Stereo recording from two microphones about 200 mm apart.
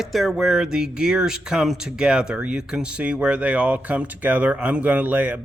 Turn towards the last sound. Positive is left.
turn(degrees=-10)  # may be behind; listen again after turning